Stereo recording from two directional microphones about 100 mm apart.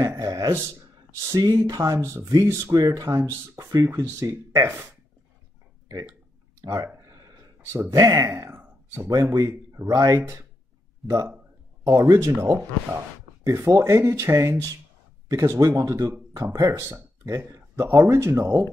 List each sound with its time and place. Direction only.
0.0 s speech: 30° right (ahead or behind)
6.6 s speech: 30° right (ahead or behind)
9.1 s speech: 40° right (ahead or behind)
9.4 s a man's voice: 25° right (ahead or behind)
11.0 s speech: centre (ahead or behind)
11.9 s speech: 30° right (ahead or behind)